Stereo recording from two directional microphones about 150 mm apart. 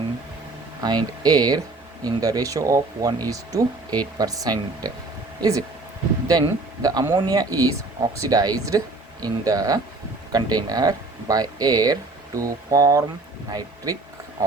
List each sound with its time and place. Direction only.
0.8 s a man's voice: 25° right (ahead or behind)